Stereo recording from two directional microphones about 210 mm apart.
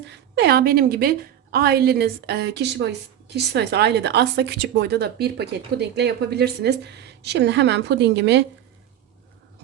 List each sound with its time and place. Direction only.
0.1 s a woman's voice: 50° right (ahead or behind)